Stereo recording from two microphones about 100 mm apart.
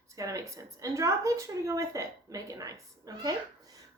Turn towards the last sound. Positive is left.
turn(degrees=-35)  # may be behind; listen again after turning